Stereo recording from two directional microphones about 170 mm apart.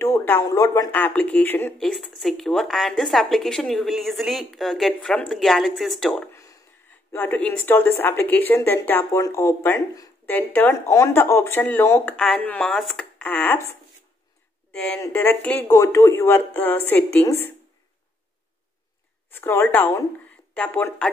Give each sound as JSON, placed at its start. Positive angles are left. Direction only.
{"t": 0.0, "sound": "speech", "side_deg": 15}
{"t": 0.9, "sound": "speech", "side_deg": 10}
{"t": 7.1, "sound": "speech", "side_deg": 10}
{"t": 14.7, "sound": "speech", "side_deg": 5}
{"t": 19.3, "sound": "speech", "side_deg": 15}